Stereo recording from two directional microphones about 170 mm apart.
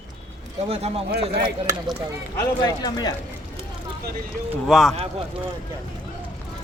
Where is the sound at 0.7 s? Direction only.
35° right (ahead or behind).